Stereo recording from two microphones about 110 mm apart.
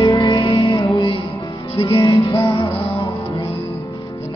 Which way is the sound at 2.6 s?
55° left (ahead or behind).